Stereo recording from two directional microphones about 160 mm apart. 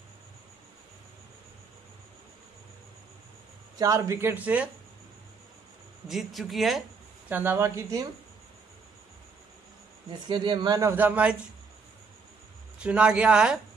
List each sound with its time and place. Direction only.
3.7 s speech: 20° right (ahead or behind)
6.0 s speech: centre (ahead or behind)
7.2 s speech: 10° right (ahead or behind)
10.1 s speech: 30° right (ahead or behind); by 11.3 s 10° right (ahead or behind)
12.7 s speech: 5° right (ahead or behind)